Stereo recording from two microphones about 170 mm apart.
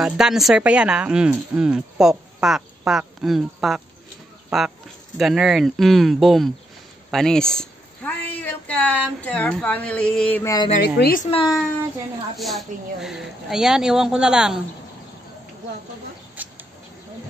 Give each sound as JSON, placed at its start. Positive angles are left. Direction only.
{"t": 0.0, "sound": "speech", "side_deg": -5}
{"t": 10.4, "sound": "a sound", "side_deg": 20}
{"t": 11.0, "sound": "a woman's voice", "side_deg": 60}
{"t": 11.2, "sound": "a child's voice", "side_deg": 30}
{"t": 12.4, "sound": "speech", "side_deg": 0}
{"t": 16.4, "sound": "a sound", "side_deg": -10}